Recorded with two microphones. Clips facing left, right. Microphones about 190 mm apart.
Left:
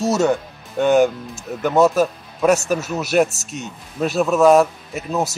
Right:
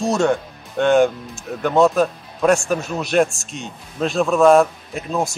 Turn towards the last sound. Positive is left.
turn(degrees=5)  # may be behind; listen again after turning